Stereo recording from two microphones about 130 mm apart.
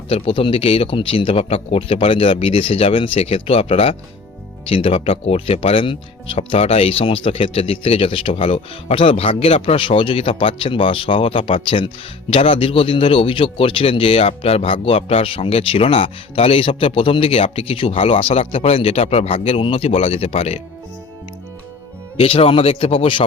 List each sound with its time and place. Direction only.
0.1 s speech: 45° left (ahead or behind)
22.2 s speech: 45° left (ahead or behind)